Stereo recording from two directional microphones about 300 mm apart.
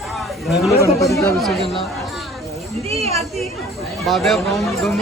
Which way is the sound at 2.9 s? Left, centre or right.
Centre.